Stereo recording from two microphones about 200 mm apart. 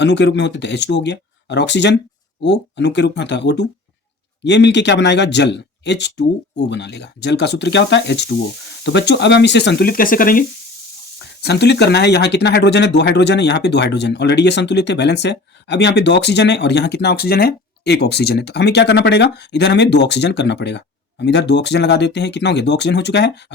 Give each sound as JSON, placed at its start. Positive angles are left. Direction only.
{"t": 0.0, "sound": "speech", "side_deg": 60}
{"t": 11.4, "sound": "speech", "side_deg": 55}